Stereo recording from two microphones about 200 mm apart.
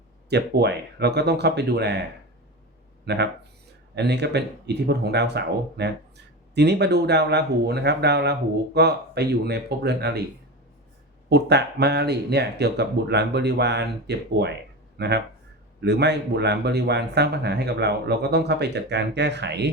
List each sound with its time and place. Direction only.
0.3 s speech: 55° right (ahead or behind)
3.1 s speech: 55° right (ahead or behind)
11.3 s speech: 55° right (ahead or behind)